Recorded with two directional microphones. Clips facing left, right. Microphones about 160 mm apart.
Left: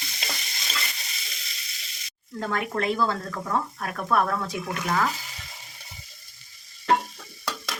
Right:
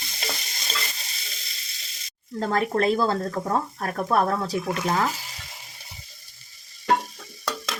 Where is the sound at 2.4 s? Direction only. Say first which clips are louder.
Right 5 dB; 35° right (ahead or behind).